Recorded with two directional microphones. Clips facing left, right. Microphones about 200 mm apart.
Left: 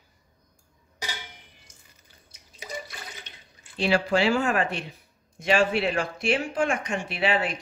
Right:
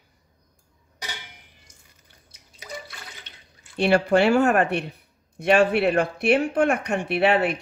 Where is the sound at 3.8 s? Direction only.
60° right (ahead or behind).